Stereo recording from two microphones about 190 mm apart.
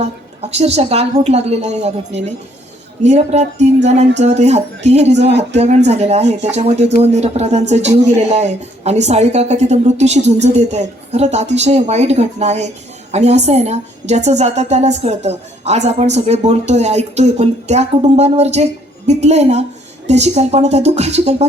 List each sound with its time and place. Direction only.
0.5 s a woman's voice: 35° right (ahead or behind)
3.0 s a woman's voice: 35° right (ahead or behind)